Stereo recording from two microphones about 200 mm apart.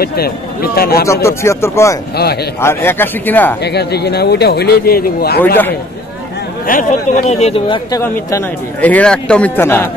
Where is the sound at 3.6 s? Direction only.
55° left (ahead or behind).